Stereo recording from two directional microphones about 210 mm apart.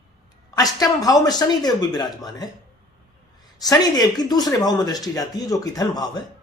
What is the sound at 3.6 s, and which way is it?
Speech, 20° left (ahead or behind).